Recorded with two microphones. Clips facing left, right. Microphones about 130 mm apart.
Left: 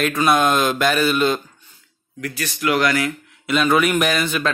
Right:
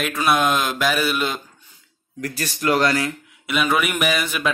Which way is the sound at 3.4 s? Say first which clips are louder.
Left 4 dB; 5° right (ahead or behind).